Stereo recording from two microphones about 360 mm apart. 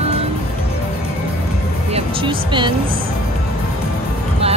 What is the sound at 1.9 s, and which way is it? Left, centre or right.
Music, centre.